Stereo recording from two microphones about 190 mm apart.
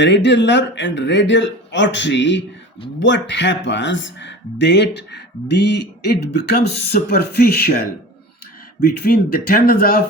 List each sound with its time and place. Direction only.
0.0 s speech: 70° left (ahead or behind); by 10.0 s 50° left (ahead or behind)